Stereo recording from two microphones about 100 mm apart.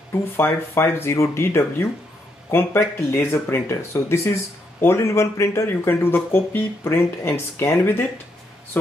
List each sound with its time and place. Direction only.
0.1 s speech: 25° left (ahead or behind)